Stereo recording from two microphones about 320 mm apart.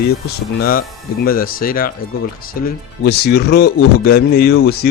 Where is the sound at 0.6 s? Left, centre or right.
Left.